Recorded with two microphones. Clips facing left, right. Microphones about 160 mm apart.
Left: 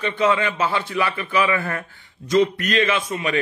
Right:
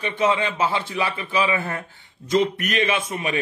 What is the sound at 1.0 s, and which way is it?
Speech, 55° left (ahead or behind).